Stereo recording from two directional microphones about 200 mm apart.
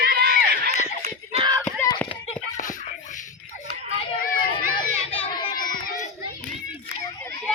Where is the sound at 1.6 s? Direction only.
15° left (ahead or behind).